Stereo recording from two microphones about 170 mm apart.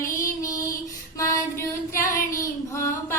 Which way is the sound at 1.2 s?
20° left (ahead or behind).